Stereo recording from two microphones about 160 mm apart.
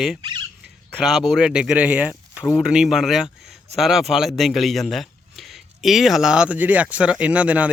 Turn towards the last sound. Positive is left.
turn(degrees=-10)  # may be behind; listen again after turning